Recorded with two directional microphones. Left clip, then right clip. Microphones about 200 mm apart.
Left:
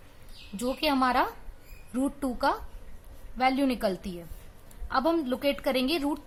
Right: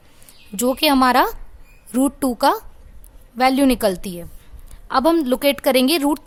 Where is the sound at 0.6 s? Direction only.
55° right (ahead or behind).